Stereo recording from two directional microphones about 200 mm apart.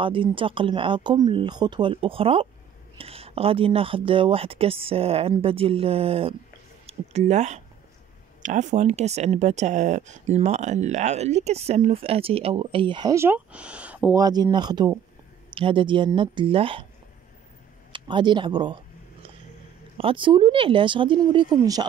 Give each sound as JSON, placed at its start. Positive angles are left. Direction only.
{"t": 0.0, "sound": "speech", "side_deg": -25}
{"t": 14.2, "sound": "speech", "side_deg": -20}
{"t": 17.9, "sound": "speech", "side_deg": -25}
{"t": 20.0, "sound": "speech", "side_deg": -25}